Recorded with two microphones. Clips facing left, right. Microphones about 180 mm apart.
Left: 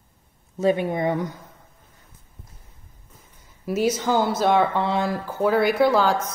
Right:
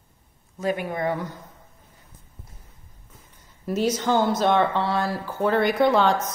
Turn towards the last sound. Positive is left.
turn(degrees=5)  # may be behind; listen again after turning